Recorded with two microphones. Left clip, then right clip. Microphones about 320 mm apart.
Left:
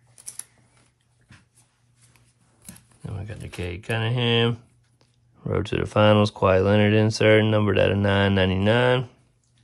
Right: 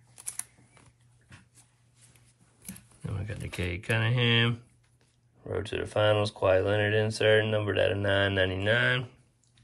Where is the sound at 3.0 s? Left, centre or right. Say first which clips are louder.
Left 2 dB; centre.